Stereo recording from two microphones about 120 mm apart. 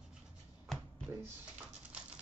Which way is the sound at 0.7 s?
Centre (ahead or behind).